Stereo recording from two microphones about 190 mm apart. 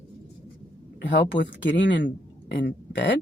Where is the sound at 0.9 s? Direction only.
70° left (ahead or behind).